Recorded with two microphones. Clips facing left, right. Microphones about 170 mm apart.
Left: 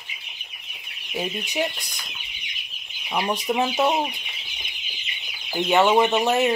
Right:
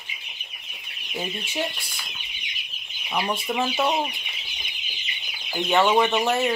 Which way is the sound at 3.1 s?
20° left (ahead or behind).